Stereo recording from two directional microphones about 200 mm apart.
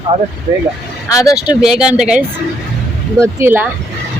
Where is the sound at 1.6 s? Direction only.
5° right (ahead or behind).